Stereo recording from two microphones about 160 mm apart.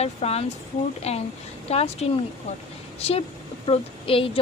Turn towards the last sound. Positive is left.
turn(degrees=35)  # may be behind; listen again after turning